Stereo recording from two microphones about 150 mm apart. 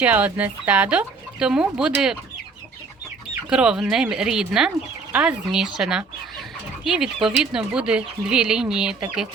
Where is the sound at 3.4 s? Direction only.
5° right (ahead or behind).